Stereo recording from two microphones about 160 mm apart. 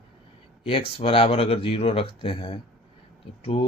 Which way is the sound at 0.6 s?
35° left (ahead or behind).